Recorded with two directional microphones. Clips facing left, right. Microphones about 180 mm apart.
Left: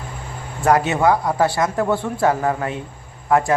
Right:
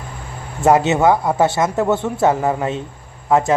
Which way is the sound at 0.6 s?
25° right (ahead or behind).